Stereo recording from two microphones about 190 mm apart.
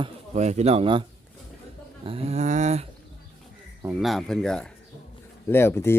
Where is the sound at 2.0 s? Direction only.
30° right (ahead or behind).